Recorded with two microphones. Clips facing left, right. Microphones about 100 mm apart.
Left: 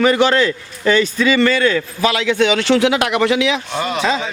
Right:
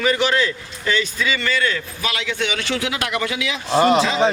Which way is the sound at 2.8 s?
75° left (ahead or behind).